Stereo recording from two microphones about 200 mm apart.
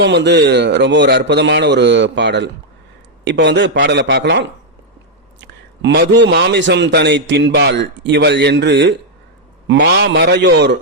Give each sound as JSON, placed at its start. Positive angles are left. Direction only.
{"t": 0.0, "sound": "a man's voice", "side_deg": -60}